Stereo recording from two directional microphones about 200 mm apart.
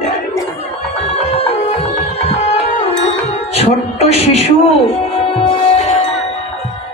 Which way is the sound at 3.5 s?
30° left (ahead or behind).